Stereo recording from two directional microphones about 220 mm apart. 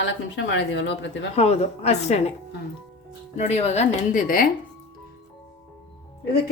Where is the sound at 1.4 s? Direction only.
30° left (ahead or behind).